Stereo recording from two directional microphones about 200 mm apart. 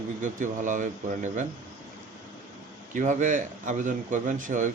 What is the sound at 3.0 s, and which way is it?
A man's voice, 40° right (ahead or behind).